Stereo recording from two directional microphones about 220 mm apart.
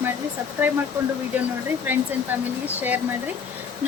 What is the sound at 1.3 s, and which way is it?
Speech, 10° right (ahead or behind).